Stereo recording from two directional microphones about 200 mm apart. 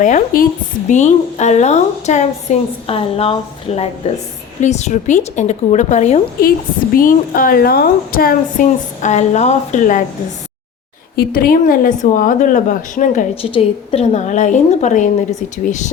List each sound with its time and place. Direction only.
0.0 s a woman's voice: 40° left (ahead or behind)
11.2 s a woman's voice: 50° left (ahead or behind)